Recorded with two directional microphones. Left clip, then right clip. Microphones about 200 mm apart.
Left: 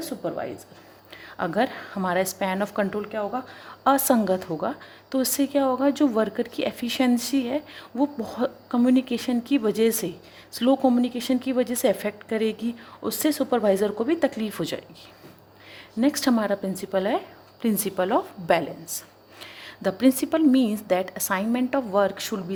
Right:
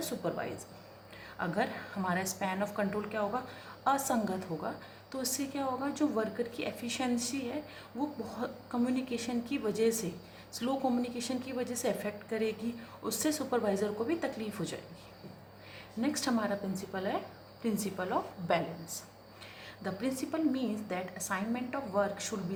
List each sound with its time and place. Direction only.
0.0 s speech: 40° left (ahead or behind)
1.4 s a woman's voice: 50° left (ahead or behind)
16.0 s a woman's voice: 45° left (ahead or behind)